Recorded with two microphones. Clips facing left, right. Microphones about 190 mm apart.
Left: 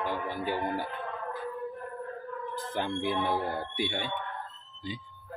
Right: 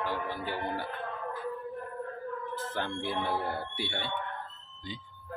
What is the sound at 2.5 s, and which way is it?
Speech, 15° left (ahead or behind).